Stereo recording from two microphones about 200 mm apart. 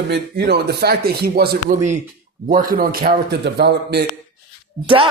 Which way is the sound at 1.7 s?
35° right (ahead or behind).